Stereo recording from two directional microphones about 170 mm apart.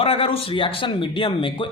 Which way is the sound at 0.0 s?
35° left (ahead or behind).